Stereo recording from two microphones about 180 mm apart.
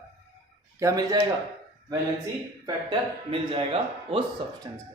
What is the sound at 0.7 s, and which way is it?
Speech, 20° right (ahead or behind).